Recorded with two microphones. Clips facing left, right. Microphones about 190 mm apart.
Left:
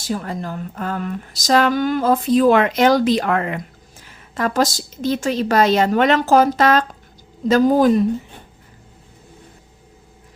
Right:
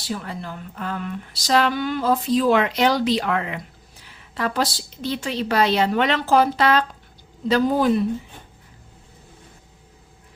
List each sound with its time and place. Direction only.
0.0 s speech: 45° left (ahead or behind)